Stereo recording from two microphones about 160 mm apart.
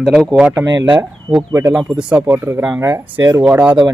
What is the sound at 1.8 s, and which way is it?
Speech, 5° right (ahead or behind).